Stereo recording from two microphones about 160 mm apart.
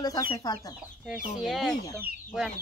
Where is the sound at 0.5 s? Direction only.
25° left (ahead or behind).